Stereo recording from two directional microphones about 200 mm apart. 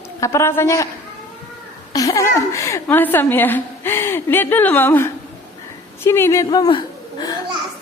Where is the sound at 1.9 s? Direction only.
15° left (ahead or behind).